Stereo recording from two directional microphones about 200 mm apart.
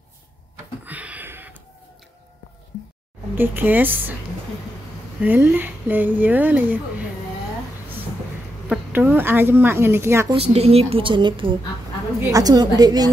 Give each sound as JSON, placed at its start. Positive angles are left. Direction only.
{"t": 0.8, "sound": "a sound", "side_deg": -10}
{"t": 3.3, "sound": "speech", "side_deg": -10}
{"t": 5.2, "sound": "speech", "side_deg": -10}
{"t": 8.6, "sound": "speech", "side_deg": -10}
{"t": 10.3, "sound": "a woman's voice", "side_deg": -30}